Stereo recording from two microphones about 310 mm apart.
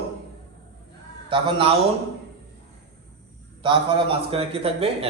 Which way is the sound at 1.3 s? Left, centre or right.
Centre.